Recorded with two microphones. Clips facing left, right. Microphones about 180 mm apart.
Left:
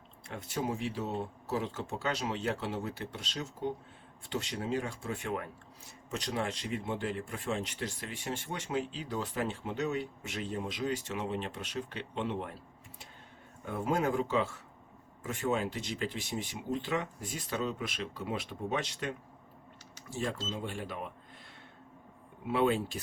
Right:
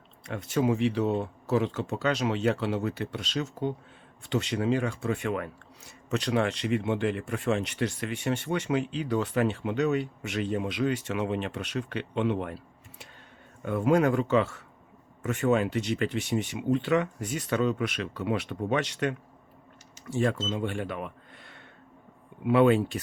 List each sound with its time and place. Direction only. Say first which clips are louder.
0.3 s speech: right 9 dB; 75° right (ahead or behind)
13.7 s speech: right 8 dB; 75° right (ahead or behind)